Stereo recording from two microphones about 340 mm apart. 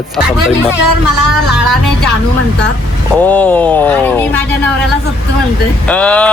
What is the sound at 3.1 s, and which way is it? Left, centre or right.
A man's voice, centre.